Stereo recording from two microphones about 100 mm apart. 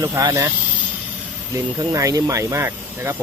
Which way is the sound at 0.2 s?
40° right (ahead or behind).